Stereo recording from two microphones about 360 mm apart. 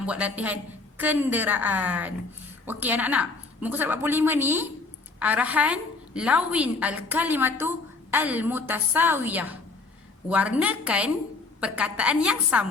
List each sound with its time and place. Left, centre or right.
0.0 s a woman's voice: centre